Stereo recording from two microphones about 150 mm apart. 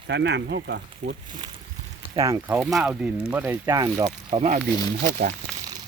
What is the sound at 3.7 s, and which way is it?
Speech, 25° right (ahead or behind).